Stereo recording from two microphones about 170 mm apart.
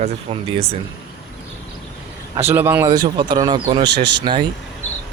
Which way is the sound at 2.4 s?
15° right (ahead or behind).